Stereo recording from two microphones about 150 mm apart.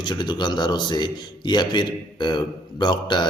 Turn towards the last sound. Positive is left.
turn(degrees=30)  # may be behind; listen again after turning